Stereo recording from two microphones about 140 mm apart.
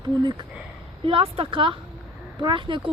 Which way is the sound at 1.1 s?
40° right (ahead or behind).